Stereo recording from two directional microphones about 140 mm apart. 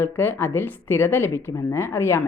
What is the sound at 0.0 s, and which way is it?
Speech, 15° left (ahead or behind).